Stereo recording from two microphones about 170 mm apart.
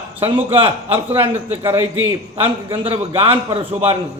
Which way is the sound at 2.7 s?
30° right (ahead or behind).